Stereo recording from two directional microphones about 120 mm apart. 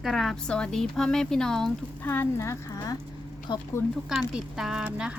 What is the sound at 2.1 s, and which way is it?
Speech, 20° left (ahead or behind).